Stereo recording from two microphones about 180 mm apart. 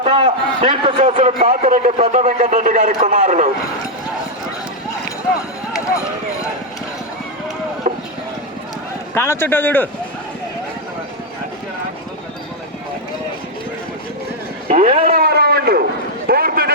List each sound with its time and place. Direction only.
0.0 s a man's voice: 30° right (ahead or behind)
1.5 s a sound: 40° right (ahead or behind)
7.9 s vehicle: 45° right (ahead or behind)
9.1 s speech: 15° left (ahead or behind)
14.7 s a man's voice: 45° right (ahead or behind); by 15.8 s 60° right (ahead or behind)
16.2 s a sound: 55° right (ahead or behind)